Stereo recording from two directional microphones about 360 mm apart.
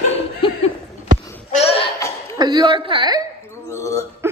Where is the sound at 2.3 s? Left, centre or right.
Centre.